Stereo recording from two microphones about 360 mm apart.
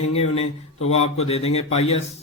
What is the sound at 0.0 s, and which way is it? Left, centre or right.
A man's voice, centre.